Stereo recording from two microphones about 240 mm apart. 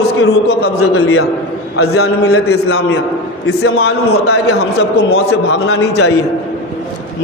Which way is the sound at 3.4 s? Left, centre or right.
Left.